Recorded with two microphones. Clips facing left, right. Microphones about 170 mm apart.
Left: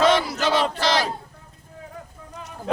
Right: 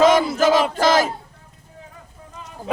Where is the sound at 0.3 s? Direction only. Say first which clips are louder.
Right 5 dB; 45° right (ahead or behind).